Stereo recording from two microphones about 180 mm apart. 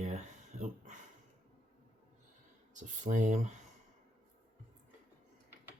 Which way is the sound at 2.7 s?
45° right (ahead or behind).